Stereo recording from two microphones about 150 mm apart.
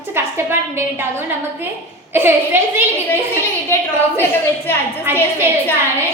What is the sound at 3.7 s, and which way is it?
Speech, 15° left (ahead or behind).